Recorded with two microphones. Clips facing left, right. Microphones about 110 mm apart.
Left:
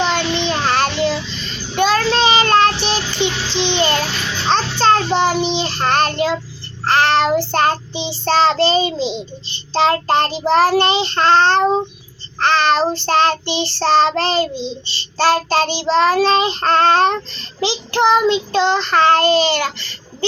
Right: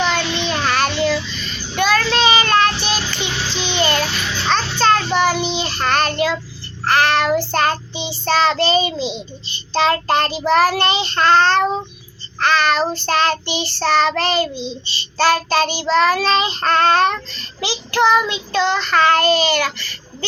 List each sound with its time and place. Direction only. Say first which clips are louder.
0.0 s child singing: left 2 dB; 25° left (ahead or behind)